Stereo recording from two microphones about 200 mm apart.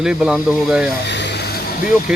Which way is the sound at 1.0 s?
60° left (ahead or behind).